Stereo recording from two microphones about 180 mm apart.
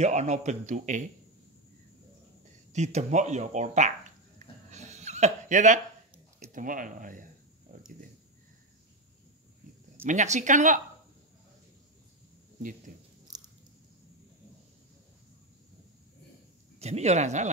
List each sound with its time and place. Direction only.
0.0 s speech: 40° right (ahead or behind)
2.7 s speech: 40° right (ahead or behind)
4.6 s dog: 40° right (ahead or behind)
6.5 s speech: 50° right (ahead or behind)
7.7 s a sound: 50° right (ahead or behind)
10.0 s speech: 40° right (ahead or behind)
12.5 s speech: 45° right (ahead or behind)
16.8 s speech: 35° right (ahead or behind)